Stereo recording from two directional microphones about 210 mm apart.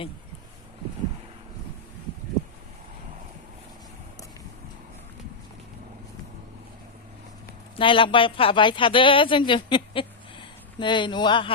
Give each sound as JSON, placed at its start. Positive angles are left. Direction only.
{"t": 7.8, "sound": "speech", "side_deg": 25}